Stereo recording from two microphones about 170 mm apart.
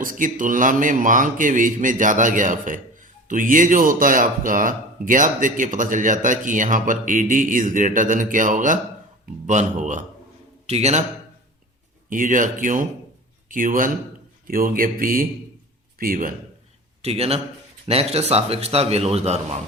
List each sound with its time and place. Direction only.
0.0 s a man's voice: 50° right (ahead or behind)
12.0 s speech: 50° right (ahead or behind)
17.0 s a man's voice: 35° right (ahead or behind)